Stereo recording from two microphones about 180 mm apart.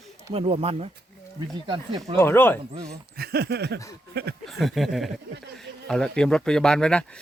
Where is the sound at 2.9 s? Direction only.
60° right (ahead or behind).